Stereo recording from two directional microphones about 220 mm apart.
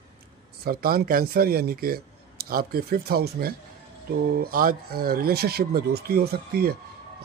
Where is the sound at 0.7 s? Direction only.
45° right (ahead or behind).